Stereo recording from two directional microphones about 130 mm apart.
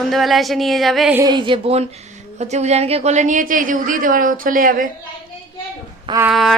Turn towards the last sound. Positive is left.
turn(degrees=0)  # may be behind; listen again after turning